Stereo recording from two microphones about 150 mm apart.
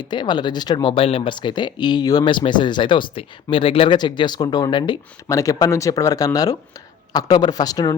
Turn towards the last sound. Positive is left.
turn(degrees=25)  # may be behind; listen again after turning